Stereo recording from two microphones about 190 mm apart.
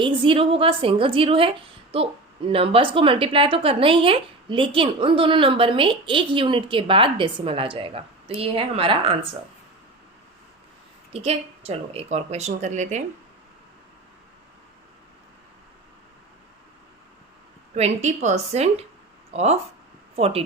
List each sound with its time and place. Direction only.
0.0 s a woman's voice: 25° right (ahead or behind)
11.1 s a woman's voice: 30° right (ahead or behind)
17.7 s a woman's voice: 35° right (ahead or behind)